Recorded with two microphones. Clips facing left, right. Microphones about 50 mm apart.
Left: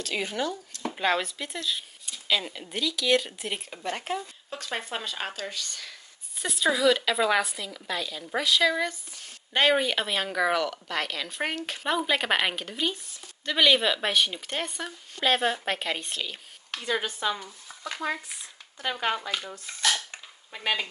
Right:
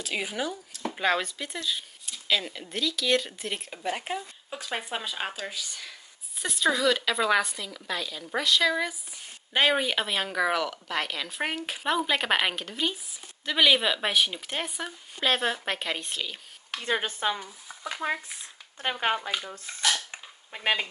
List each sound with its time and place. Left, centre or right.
0.0 s speech: centre
16.8 s speech: right
17.4 s speech: centre
18.8 s speech: right
19.6 s speech: centre